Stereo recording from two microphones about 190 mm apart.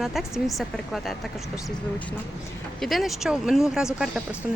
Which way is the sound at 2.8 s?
Centre (ahead or behind).